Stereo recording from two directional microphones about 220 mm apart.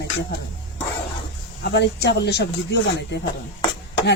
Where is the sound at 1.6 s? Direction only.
50° left (ahead or behind).